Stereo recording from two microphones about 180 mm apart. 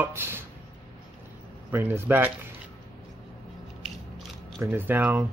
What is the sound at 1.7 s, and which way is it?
Speech, 10° right (ahead or behind).